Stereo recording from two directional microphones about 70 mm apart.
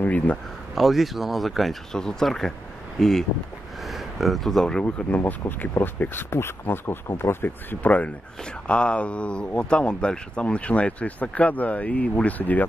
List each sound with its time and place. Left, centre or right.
0.0 s speech: left
0.7 s speech: centre
4.8 s speech: left